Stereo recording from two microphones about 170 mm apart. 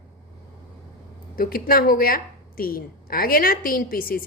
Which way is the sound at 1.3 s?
60° left (ahead or behind).